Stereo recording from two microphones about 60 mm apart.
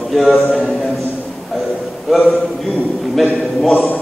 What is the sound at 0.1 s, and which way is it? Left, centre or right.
Speech, centre.